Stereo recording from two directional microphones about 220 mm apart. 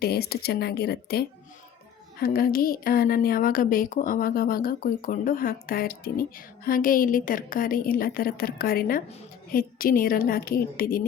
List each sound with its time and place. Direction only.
0.0 s speech: 45° left (ahead or behind)
2.2 s a woman's voice: 40° left (ahead or behind)